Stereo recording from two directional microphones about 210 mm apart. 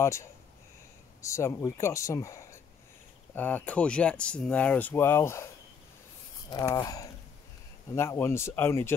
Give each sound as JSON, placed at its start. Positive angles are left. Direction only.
{"t": 0.0, "sound": "speech", "side_deg": 15}
{"t": 6.5, "sound": "speech", "side_deg": 15}